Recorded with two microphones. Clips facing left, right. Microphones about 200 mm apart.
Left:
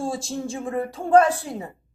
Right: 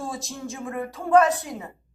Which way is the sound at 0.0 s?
30° left (ahead or behind).